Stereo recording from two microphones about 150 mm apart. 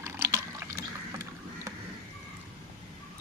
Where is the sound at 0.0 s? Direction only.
20° right (ahead or behind).